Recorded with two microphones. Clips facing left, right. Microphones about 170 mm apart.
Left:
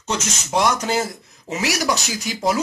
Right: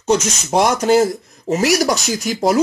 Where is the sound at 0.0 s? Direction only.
45° right (ahead or behind).